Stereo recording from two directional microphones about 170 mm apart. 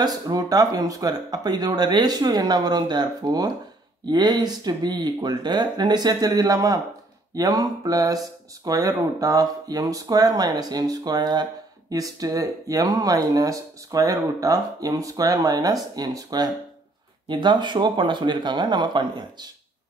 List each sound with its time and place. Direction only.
0.0 s speech: 20° right (ahead or behind)